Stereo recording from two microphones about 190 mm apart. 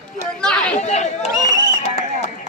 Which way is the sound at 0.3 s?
5° left (ahead or behind).